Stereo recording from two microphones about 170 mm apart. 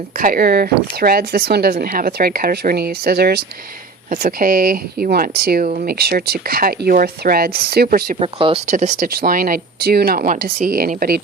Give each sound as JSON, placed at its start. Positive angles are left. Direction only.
{"t": 0.2, "sound": "speech", "side_deg": -55}
{"t": 8.2, "sound": "speech", "side_deg": -35}
{"t": 8.6, "sound": "speech", "side_deg": -45}
{"t": 9.1, "sound": "speech", "side_deg": -60}